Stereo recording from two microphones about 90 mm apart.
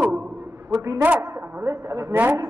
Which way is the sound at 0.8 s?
35° right (ahead or behind).